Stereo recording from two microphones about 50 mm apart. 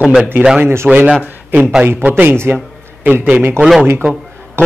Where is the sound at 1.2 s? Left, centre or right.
Right.